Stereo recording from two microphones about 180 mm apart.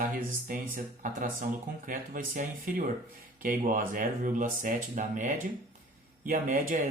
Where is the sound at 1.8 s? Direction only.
50° right (ahead or behind).